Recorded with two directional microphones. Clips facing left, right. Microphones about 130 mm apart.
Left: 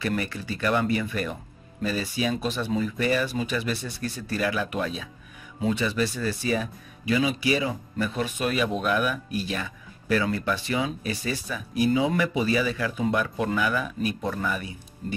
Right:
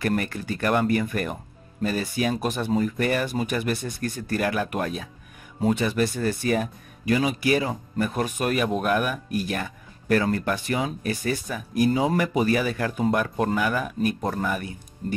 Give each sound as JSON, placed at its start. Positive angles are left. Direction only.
{"t": 0.0, "sound": "speech", "side_deg": -50}